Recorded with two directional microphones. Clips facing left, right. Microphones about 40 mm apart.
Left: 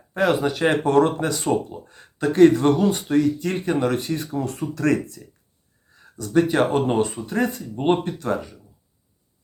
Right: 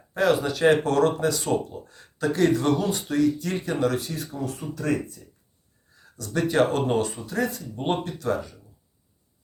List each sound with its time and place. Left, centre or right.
0.1 s speech: left
3.9 s speech: left
6.1 s speech: left